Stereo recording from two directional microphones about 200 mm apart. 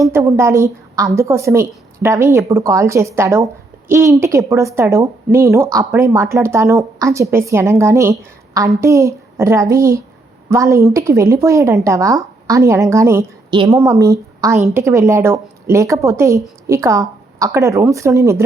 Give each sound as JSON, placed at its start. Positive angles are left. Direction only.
{"t": 0.0, "sound": "a woman's voice", "side_deg": -15}